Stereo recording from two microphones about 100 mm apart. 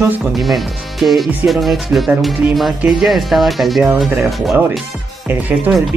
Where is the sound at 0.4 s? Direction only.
Centre (ahead or behind).